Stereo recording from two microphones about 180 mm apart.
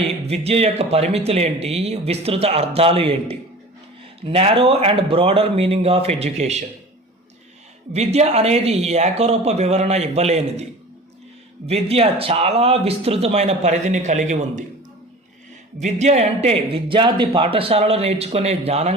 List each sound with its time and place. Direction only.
0.3 s a man's voice: 35° right (ahead or behind)
7.9 s a man's voice: 35° right (ahead or behind)
15.8 s a man's voice: 40° right (ahead or behind)